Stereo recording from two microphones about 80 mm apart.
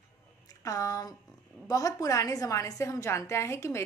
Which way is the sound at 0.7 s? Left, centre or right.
Left.